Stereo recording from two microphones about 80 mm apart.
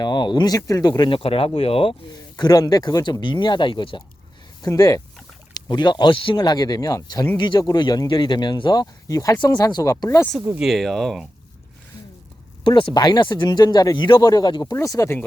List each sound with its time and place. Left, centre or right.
0.0 s speech: left
0.5 s speech: left
4.6 s speech: left
5.5 s speech: left
7.6 s speech: left
9.4 s speech: left
10.6 s speech: centre
12.6 s speech: left
13.9 s speech: left
15.0 s speech: left